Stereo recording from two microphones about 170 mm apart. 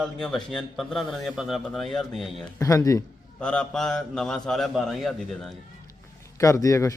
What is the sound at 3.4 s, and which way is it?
A man's voice, 5° left (ahead or behind).